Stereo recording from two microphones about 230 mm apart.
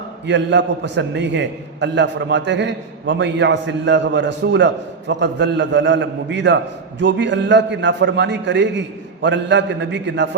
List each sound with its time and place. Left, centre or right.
0.3 s a man's voice: right